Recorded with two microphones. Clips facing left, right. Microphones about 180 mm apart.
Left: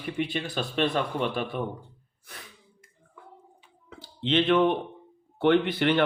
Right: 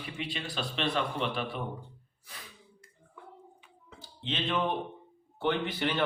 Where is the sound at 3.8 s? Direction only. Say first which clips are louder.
Left 8 dB; 70° left (ahead or behind).